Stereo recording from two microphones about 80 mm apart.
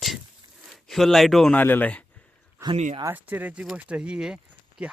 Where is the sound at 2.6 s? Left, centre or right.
Right.